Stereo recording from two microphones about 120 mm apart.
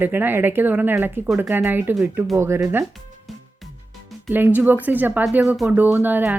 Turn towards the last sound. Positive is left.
turn(degrees=-15)  # may be behind; listen again after turning